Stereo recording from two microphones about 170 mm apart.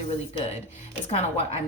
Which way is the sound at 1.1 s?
40° left (ahead or behind).